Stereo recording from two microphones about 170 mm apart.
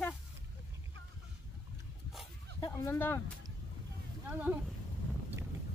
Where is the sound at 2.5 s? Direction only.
15° left (ahead or behind).